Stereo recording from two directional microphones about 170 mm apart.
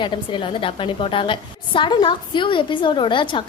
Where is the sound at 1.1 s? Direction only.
30° left (ahead or behind).